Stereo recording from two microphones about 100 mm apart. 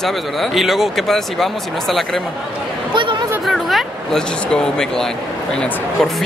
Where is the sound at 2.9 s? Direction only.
55° right (ahead or behind).